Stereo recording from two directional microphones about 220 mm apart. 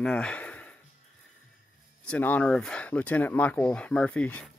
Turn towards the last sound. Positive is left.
turn(degrees=5)  # may be behind; listen again after turning